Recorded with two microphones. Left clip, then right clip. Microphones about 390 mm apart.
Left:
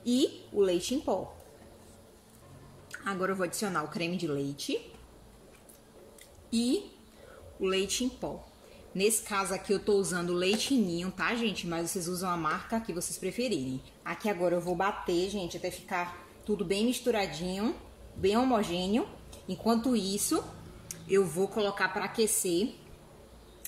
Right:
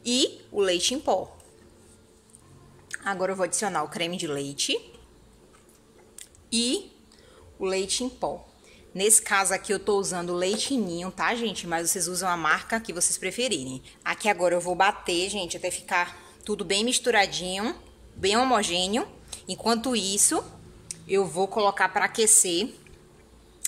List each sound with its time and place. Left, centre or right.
0.7 s a woman's voice: right
2.9 s a woman's voice: centre
6.5 s a woman's voice: right